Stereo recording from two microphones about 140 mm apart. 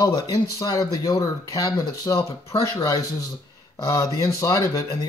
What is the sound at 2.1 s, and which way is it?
Speech, 25° left (ahead or behind).